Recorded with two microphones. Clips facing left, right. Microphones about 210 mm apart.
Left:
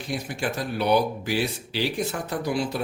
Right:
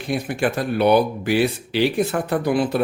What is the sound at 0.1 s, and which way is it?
Speech, 60° right (ahead or behind).